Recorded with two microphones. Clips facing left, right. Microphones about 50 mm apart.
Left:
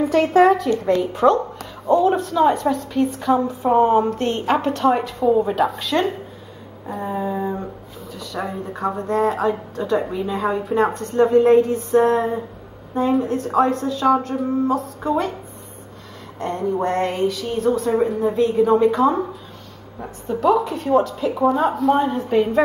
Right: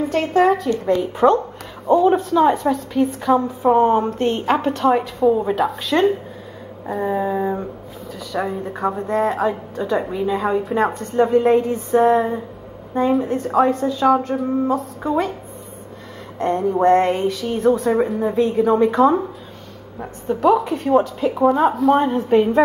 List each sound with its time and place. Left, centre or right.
0.3 s a woman's voice: centre
1.1 s a woman's voice: centre
4.2 s a woman's voice: centre
7.0 s a sound: centre
8.2 s a woman's voice: centre
16.3 s a woman's voice: centre